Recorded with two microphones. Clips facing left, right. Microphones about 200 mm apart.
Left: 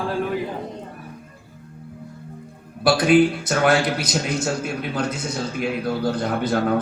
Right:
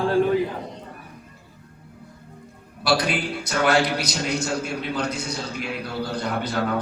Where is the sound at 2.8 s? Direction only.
50° left (ahead or behind).